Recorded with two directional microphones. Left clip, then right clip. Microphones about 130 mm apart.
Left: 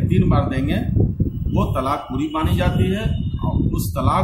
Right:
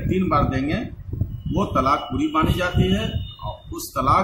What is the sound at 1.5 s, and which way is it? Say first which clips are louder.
Speech: right 2 dB; centre (ahead or behind).